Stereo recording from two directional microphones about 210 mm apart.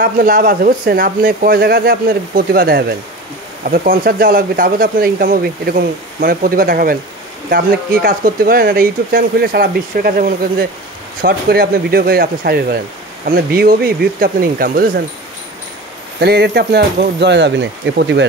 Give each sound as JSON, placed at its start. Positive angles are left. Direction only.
{"t": 0.0, "sound": "speech", "side_deg": -40}
{"t": 16.2, "sound": "speech", "side_deg": -50}